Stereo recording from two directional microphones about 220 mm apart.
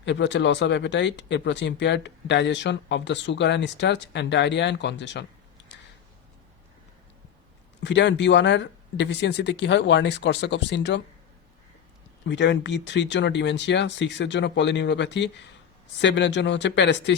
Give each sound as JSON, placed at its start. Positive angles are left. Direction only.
{"t": 0.0, "sound": "speech", "side_deg": 55}
{"t": 7.8, "sound": "speech", "side_deg": 55}
{"t": 12.3, "sound": "speech", "side_deg": 55}